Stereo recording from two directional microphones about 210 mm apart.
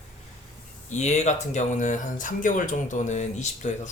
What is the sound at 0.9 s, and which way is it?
Speech, 35° left (ahead or behind).